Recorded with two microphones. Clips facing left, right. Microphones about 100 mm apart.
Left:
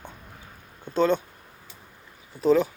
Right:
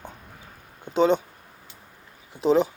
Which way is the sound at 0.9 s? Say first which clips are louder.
Right 2 dB; 20° right (ahead or behind).